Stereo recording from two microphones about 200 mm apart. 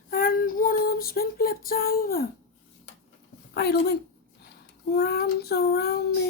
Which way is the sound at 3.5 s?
55° left (ahead or behind).